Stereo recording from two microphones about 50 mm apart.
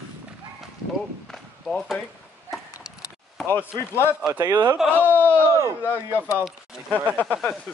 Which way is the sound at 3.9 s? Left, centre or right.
Left.